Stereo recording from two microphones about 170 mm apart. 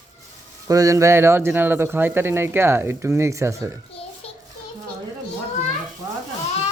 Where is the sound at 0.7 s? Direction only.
20° right (ahead or behind).